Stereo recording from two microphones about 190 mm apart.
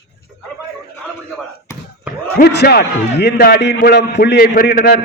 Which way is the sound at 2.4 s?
60° left (ahead or behind).